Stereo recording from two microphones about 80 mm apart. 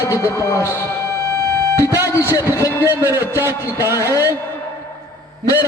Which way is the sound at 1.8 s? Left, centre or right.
Right.